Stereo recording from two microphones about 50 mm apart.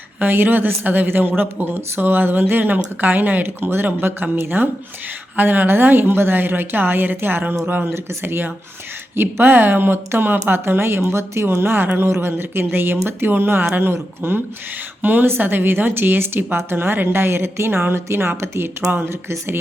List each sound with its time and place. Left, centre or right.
0.2 s a woman's voice: right
7.6 s speech: right
7.9 s a woman's voice: right
15.0 s a woman's voice: right